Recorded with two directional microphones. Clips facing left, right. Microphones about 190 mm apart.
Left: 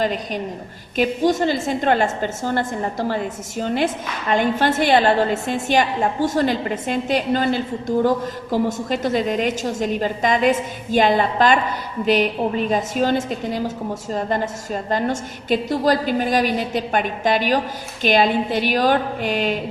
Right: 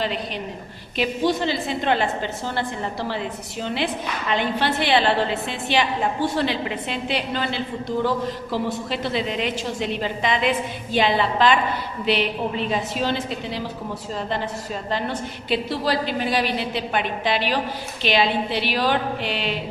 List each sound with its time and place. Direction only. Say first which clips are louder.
0.0 s a woman's voice: left 4 dB; 45° left (ahead or behind)